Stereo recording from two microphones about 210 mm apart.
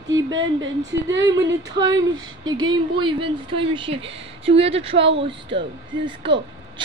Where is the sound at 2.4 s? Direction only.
20° right (ahead or behind).